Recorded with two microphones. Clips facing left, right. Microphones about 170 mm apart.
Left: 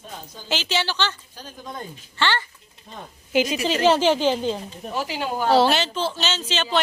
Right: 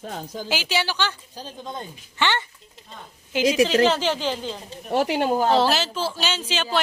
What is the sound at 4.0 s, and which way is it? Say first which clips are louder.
Speech: left 5 dB; 15° left (ahead or behind).